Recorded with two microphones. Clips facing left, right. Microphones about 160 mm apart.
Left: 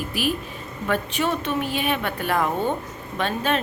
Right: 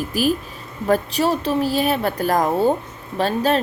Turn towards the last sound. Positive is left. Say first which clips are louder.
# right 5 dB
turn(degrees=-35)  # may be behind; listen again after turning